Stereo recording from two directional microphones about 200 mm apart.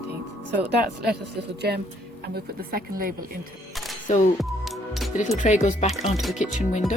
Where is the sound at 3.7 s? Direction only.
Centre (ahead or behind).